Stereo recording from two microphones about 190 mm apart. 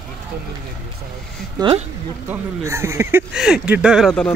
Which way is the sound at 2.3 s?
15° right (ahead or behind).